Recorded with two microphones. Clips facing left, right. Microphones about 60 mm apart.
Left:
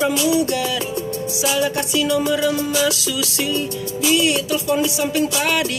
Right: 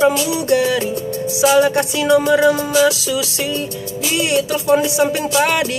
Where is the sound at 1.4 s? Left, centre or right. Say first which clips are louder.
Right 8 dB; right.